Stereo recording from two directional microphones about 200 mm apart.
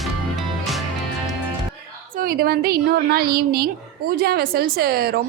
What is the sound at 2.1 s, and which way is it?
A woman's voice, 45° right (ahead or behind).